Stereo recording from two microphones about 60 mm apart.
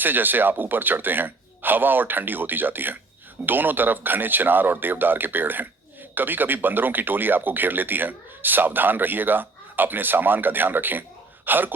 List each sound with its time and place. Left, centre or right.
0.0 s speech: right